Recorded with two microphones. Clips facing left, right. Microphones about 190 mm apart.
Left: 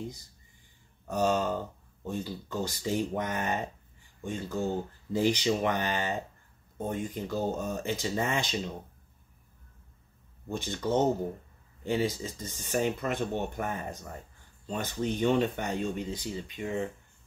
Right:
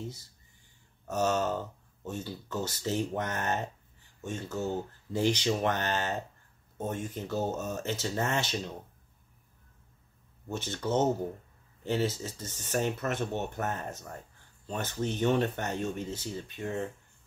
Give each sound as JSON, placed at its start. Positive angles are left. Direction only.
{"t": 0.0, "sound": "speech", "side_deg": 15}
{"t": 10.5, "sound": "speech", "side_deg": 15}